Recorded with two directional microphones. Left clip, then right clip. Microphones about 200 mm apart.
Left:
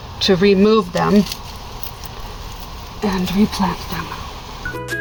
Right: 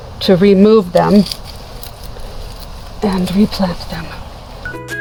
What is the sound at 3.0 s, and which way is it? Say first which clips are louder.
Speech: right 4 dB; 55° right (ahead or behind).